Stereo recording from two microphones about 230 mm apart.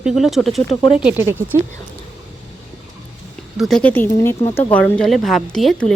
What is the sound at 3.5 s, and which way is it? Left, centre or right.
Speech, centre.